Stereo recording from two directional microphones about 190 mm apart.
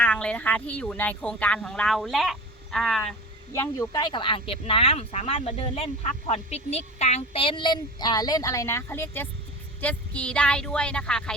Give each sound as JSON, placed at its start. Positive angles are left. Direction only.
{"t": 0.0, "sound": "speech", "side_deg": 5}
{"t": 3.5, "sound": "speech", "side_deg": 15}